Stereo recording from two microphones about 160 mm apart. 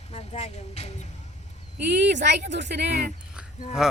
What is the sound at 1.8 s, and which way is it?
Speech, 90° right.